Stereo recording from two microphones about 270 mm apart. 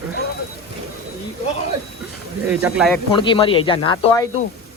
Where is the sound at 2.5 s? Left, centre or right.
Centre.